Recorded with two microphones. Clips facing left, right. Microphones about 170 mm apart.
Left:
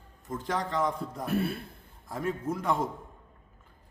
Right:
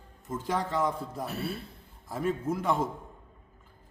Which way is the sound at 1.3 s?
55° left (ahead or behind).